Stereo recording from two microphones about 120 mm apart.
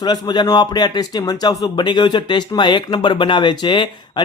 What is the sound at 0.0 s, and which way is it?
Speech, 35° left (ahead or behind).